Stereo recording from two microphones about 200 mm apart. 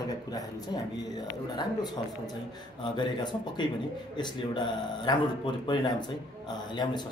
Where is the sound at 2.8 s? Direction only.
20° left (ahead or behind).